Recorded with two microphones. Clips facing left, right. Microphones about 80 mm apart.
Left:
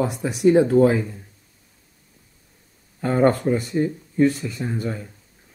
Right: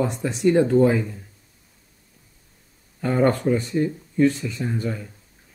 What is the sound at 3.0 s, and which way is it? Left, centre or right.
Speech, centre.